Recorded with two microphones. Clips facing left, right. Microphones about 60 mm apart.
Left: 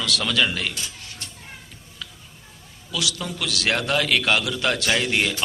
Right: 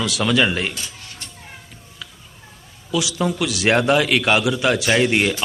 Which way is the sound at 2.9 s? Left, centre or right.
Centre.